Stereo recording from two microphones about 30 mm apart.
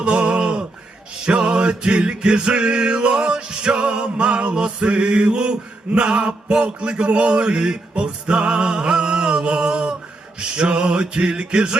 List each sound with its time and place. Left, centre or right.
0.0 s music: right